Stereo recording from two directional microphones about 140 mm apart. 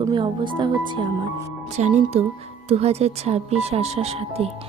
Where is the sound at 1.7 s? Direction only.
55° right (ahead or behind).